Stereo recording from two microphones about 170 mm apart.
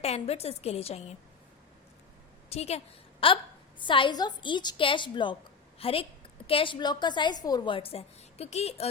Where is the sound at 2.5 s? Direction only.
40° left (ahead or behind).